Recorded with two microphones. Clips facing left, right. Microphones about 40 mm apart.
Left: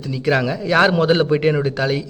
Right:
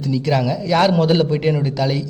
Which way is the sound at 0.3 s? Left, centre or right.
Left.